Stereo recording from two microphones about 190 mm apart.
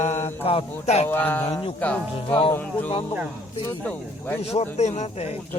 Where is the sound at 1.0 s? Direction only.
10° left (ahead or behind).